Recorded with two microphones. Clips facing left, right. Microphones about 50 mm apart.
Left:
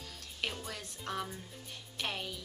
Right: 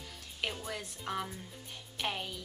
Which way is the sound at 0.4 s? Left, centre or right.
Centre.